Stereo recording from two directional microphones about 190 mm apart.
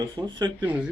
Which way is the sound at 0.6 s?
10° right (ahead or behind).